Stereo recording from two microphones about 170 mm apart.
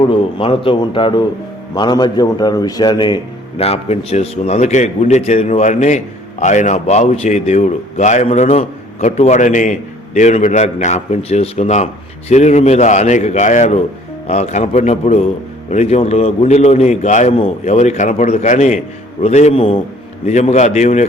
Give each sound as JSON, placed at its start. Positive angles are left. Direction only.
{"t": 0.0, "sound": "a man's voice", "side_deg": 30}
{"t": 3.6, "sound": "a man's voice", "side_deg": 35}